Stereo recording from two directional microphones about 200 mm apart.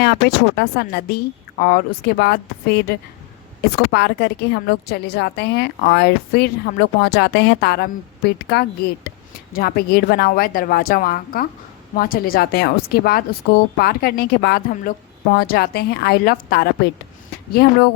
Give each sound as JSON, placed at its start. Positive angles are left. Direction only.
{"t": 0.0, "sound": "a woman's voice", "side_deg": 55}
{"t": 3.9, "sound": "a woman's voice", "side_deg": 55}